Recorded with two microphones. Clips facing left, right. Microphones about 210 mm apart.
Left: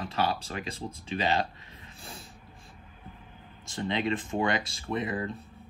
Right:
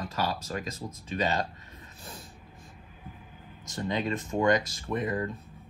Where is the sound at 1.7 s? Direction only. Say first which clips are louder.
Even; 30° left (ahead or behind).